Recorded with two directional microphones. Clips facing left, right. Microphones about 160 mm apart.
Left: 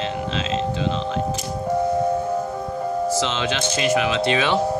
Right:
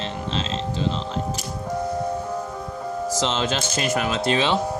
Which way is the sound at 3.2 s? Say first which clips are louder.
Even; 40° right (ahead or behind).